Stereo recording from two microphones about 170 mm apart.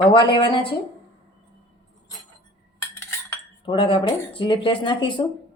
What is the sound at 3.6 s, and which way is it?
Speech, 30° left (ahead or behind).